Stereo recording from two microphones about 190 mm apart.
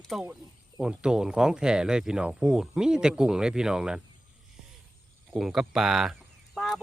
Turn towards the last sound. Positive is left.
turn(degrees=0)  # may be behind; listen again after turning